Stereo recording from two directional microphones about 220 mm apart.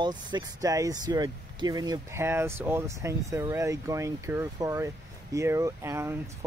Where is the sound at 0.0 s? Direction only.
20° right (ahead or behind).